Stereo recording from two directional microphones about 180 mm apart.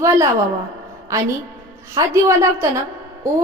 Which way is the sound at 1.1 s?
15° right (ahead or behind).